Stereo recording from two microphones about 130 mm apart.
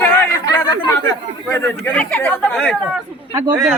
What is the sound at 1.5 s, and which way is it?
Speech, 15° left (ahead or behind).